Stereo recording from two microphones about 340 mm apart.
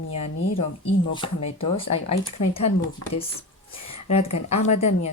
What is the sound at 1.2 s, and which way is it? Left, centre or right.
Speech, centre.